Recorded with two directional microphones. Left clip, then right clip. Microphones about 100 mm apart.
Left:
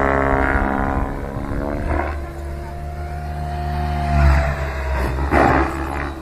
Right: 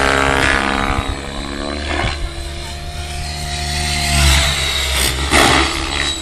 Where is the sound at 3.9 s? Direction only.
35° right (ahead or behind).